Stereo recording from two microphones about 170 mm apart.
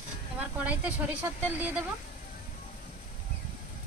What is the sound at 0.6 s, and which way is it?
Speech, 10° right (ahead or behind).